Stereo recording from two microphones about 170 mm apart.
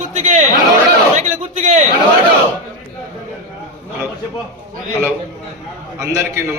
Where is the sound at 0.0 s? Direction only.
45° right (ahead or behind).